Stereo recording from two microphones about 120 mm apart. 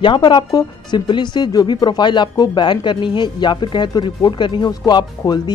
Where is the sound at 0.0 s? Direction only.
40° left (ahead or behind).